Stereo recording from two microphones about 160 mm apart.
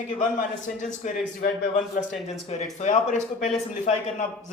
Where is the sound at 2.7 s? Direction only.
50° left (ahead or behind).